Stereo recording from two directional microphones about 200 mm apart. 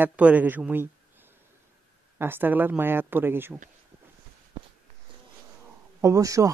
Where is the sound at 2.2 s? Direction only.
10° right (ahead or behind).